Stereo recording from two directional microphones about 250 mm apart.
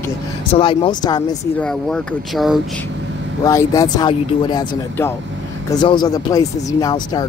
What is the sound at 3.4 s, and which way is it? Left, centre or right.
Speech, centre.